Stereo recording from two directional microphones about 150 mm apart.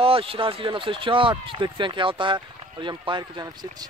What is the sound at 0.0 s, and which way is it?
Speech, 40° right (ahead or behind).